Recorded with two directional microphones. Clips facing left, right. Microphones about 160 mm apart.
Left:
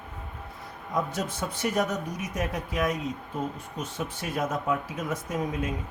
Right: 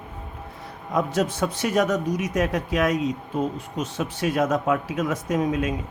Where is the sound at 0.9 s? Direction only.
85° right.